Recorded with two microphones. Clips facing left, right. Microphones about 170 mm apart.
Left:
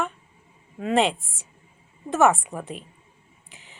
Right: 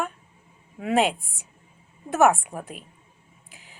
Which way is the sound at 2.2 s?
Centre (ahead or behind).